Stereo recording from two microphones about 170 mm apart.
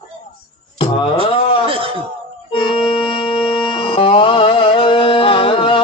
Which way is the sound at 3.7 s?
30° left (ahead or behind).